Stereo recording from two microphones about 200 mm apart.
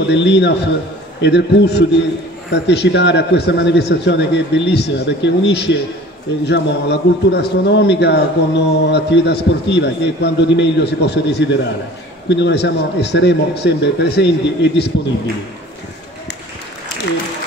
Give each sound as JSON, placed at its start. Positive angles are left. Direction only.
{"t": 0.0, "sound": "a man's voice", "side_deg": 60}